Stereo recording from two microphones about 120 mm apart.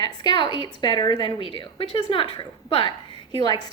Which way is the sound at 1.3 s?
45° left (ahead or behind).